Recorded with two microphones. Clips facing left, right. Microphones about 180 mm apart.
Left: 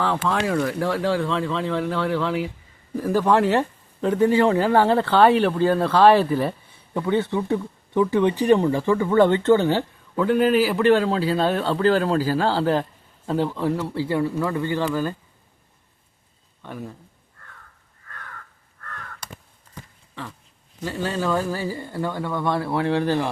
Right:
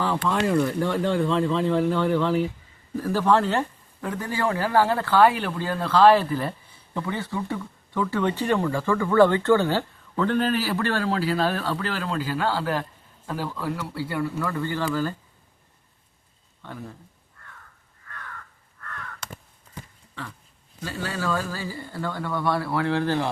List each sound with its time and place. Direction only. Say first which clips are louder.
0.2 s speech: even; centre (ahead or behind)
3.0 s speech: left 2 dB; 15° left (ahead or behind)
20.8 s speech: left 4 dB; 20° left (ahead or behind)